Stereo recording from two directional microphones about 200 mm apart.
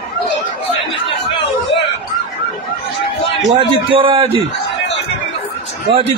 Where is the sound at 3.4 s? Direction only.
25° right (ahead or behind).